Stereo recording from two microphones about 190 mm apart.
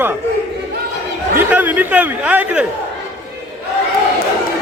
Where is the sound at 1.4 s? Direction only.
10° right (ahead or behind).